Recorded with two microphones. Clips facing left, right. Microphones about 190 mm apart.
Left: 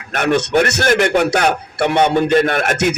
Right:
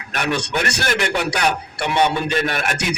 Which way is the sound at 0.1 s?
55° left (ahead or behind).